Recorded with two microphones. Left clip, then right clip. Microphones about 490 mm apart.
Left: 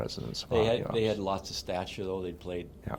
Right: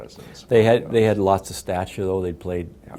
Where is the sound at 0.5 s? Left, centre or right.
Right.